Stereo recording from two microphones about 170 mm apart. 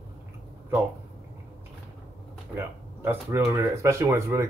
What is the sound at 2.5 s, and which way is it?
Speech, 15° right (ahead or behind).